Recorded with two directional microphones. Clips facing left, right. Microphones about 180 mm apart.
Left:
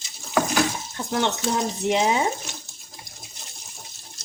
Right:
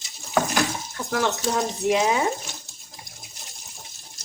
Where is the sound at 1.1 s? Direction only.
25° left (ahead or behind).